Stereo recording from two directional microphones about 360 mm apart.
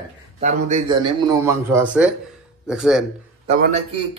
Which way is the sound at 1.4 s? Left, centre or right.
Centre.